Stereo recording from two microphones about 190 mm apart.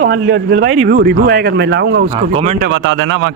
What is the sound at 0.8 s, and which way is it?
Speech, 55° right (ahead or behind).